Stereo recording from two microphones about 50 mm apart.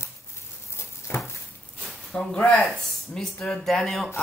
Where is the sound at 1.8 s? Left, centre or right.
Centre.